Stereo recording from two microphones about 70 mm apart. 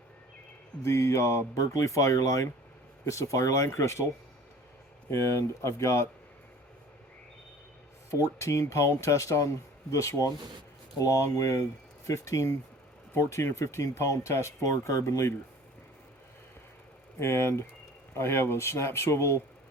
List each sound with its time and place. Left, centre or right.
0.8 s speech: left
5.1 s speech: left
8.1 s speech: left
17.2 s speech: left